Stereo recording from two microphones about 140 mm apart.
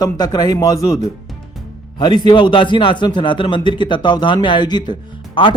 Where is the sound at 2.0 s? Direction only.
35° left (ahead or behind).